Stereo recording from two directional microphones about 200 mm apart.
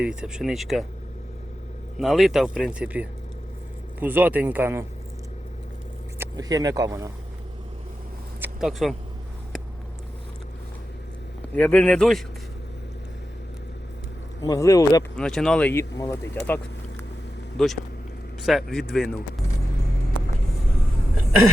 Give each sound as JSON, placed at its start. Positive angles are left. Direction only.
{"t": 0.0, "sound": "speech", "side_deg": -5}
{"t": 2.0, "sound": "a man's voice", "side_deg": 0}
{"t": 6.1, "sound": "speech", "side_deg": -15}
{"t": 8.4, "sound": "a sound", "side_deg": 0}
{"t": 11.5, "sound": "speech", "side_deg": 5}
{"t": 14.4, "sound": "speech", "side_deg": 15}
{"t": 15.1, "sound": "speech", "side_deg": 5}
{"t": 17.6, "sound": "speech", "side_deg": 0}